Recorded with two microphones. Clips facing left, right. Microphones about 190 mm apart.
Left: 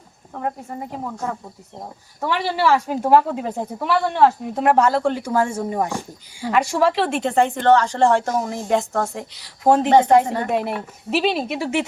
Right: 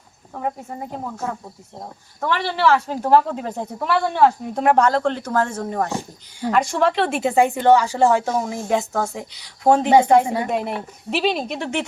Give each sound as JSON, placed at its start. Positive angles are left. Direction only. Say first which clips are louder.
{"t": 0.3, "sound": "a woman's voice", "louder": "even", "side_deg": -5}
{"t": 2.2, "sound": "a woman's voice", "louder": "even", "side_deg": 10}
{"t": 10.2, "sound": "speech", "louder": "right 1 dB", "side_deg": -10}
{"t": 10.5, "sound": "a woman's voice", "louder": "left 1 dB", "side_deg": 0}